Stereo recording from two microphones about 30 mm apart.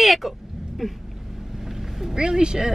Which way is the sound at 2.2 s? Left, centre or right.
Right.